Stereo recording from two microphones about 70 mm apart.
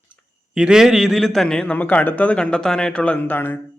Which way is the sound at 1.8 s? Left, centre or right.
Left.